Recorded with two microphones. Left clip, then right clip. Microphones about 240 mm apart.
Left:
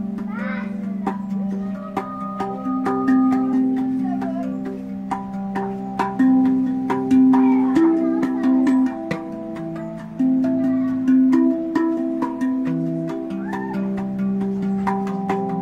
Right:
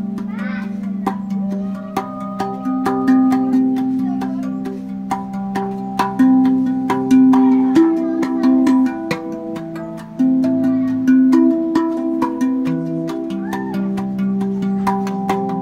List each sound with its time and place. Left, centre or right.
2.8 s music: right
5.9 s music: right
10.1 s music: right
14.4 s music: right